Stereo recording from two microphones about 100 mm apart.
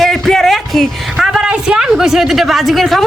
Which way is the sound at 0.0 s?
Centre (ahead or behind).